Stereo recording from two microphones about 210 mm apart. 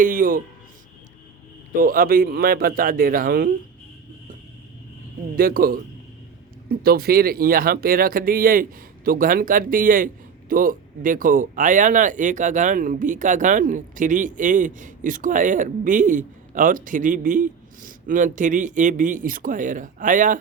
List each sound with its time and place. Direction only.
0.0 s speech: 40° right (ahead or behind)
1.8 s speech: 40° right (ahead or behind)
5.4 s speech: 45° right (ahead or behind)